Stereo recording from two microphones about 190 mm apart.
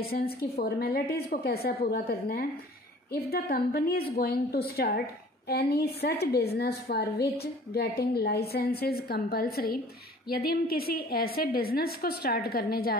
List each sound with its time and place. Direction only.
0.0 s a woman's voice: 55° left (ahead or behind)